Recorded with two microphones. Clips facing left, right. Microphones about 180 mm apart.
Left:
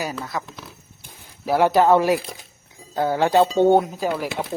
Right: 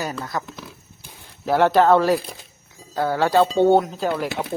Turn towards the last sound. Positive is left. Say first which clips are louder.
# right 1 dB
turn(degrees=10)  # may be behind; listen again after turning